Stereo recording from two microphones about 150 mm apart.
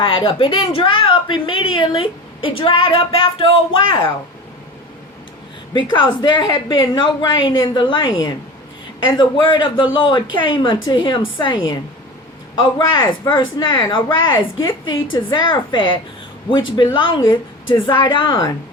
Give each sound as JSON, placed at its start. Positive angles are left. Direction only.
{"t": 0.0, "sound": "a woman's voice", "side_deg": 35}
{"t": 5.9, "sound": "a woman's voice", "side_deg": 30}